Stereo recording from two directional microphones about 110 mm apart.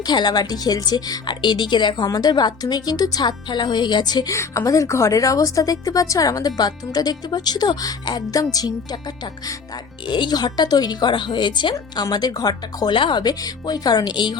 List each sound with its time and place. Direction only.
0.0 s a woman's voice: 40° left (ahead or behind)
10.1 s a woman's voice: 45° left (ahead or behind)